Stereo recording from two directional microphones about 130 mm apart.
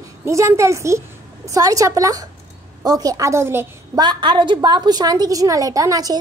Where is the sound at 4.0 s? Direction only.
35° right (ahead or behind).